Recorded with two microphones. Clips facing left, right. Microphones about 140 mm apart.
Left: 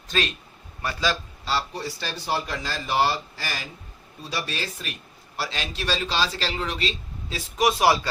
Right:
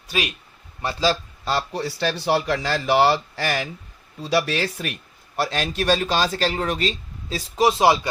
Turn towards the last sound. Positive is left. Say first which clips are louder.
# right 3 dB
turn(degrees=-25)  # may be behind; listen again after turning